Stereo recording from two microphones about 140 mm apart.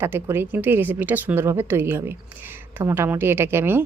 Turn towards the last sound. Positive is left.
turn(degrees=-15)  # may be behind; listen again after turning